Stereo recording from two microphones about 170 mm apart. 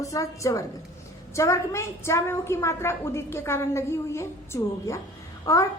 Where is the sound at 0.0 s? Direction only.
20° left (ahead or behind).